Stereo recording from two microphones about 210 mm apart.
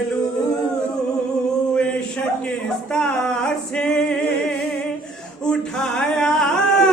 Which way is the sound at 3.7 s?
5° left (ahead or behind).